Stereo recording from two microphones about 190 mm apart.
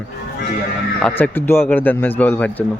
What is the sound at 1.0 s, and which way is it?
A man's voice, 10° left (ahead or behind).